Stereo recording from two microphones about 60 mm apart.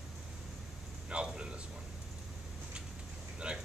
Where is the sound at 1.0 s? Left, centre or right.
Centre.